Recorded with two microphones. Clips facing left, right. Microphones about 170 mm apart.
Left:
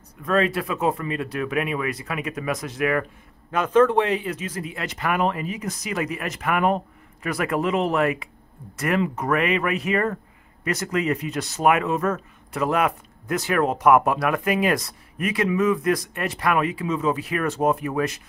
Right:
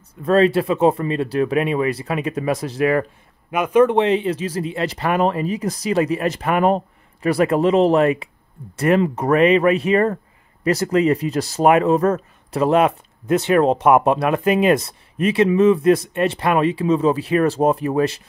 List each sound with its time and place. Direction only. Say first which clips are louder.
0.2 s speech: right 7 dB; 30° right (ahead or behind)
3.5 s speech: right 3 dB; 15° right (ahead or behind); by 18.2 s 30° right (ahead or behind)